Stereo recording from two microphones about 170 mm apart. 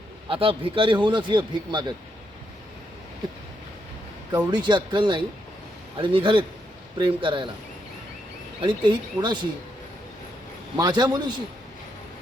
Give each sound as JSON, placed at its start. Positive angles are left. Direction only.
{"t": 0.3, "sound": "a man's voice", "side_deg": -30}
{"t": 4.3, "sound": "a man's voice", "side_deg": -25}
{"t": 8.6, "sound": "a man's voice", "side_deg": -25}
{"t": 10.8, "sound": "a man's voice", "side_deg": -25}